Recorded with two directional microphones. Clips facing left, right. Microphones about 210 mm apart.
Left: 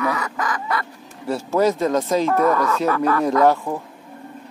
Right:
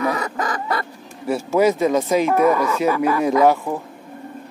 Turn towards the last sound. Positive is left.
turn(degrees=-5)  # may be behind; listen again after turning